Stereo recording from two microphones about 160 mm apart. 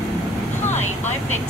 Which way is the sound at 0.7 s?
45° left (ahead or behind).